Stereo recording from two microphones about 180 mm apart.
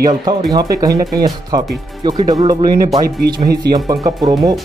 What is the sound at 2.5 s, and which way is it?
Speech, 30° right (ahead or behind).